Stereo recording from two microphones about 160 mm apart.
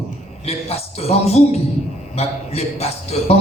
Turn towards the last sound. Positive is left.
turn(degrees=40)  # may be behind; listen again after turning